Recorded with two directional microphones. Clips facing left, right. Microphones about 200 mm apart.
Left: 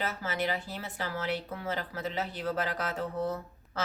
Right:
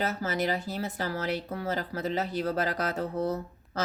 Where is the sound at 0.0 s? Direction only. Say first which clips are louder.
Right 4 dB; 40° right (ahead or behind).